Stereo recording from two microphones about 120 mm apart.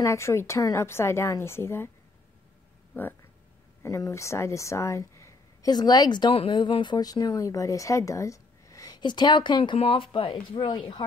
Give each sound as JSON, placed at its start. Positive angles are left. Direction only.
{"t": 0.0, "sound": "a woman's voice", "side_deg": 25}
{"t": 2.9, "sound": "a woman's voice", "side_deg": 15}